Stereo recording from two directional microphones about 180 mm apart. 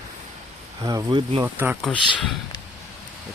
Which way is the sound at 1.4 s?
10° right (ahead or behind).